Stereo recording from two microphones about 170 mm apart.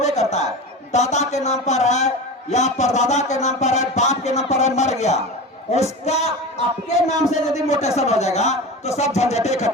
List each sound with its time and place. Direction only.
0.0 s chatter: 40° left (ahead or behind)
0.9 s a man's voice: 40° left (ahead or behind)